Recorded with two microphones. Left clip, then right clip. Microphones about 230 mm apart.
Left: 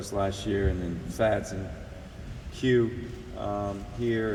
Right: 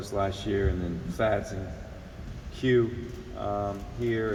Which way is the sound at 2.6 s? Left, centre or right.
Left.